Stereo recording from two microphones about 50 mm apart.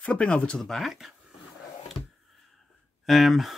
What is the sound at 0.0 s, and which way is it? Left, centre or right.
Speech, left.